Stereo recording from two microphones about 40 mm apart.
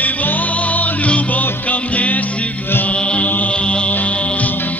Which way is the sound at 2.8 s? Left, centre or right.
Left.